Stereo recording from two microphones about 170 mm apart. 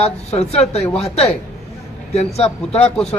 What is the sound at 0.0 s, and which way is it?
A man's voice, 40° left (ahead or behind).